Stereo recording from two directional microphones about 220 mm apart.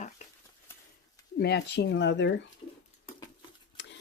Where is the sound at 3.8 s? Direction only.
55° left (ahead or behind).